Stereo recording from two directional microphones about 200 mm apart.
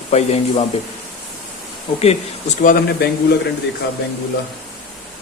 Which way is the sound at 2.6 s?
45° left (ahead or behind).